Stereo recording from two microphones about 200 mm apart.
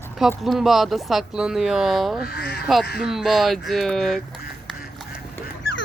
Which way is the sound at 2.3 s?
50° left (ahead or behind).